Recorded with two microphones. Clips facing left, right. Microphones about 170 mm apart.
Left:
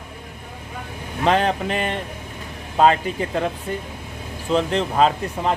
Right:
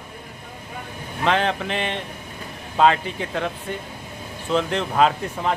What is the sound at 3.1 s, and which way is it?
Speech, 5° left (ahead or behind).